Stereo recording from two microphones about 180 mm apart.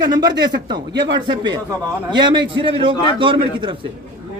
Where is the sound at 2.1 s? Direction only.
25° right (ahead or behind).